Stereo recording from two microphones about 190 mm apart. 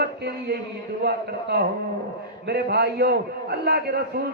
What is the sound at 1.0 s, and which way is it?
A man's voice, 60° right (ahead or behind).